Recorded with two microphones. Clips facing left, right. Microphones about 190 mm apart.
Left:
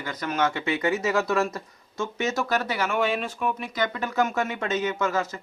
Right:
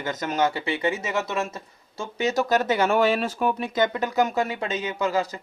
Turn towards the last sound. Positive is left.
turn(degrees=-35)  # may be behind; listen again after turning